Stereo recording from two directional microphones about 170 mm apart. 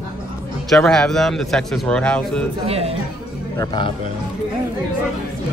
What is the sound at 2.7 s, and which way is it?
Speech, 35° right (ahead or behind).